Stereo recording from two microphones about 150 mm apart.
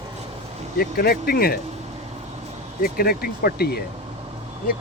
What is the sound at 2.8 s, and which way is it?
Speech, 80° left.